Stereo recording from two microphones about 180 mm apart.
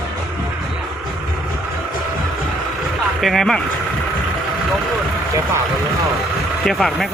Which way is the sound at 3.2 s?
Centre (ahead or behind).